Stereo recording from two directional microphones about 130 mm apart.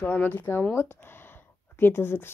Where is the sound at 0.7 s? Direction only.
20° left (ahead or behind).